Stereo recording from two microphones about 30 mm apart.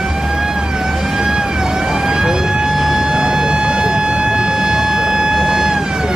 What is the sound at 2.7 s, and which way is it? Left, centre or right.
Civil defense siren, centre.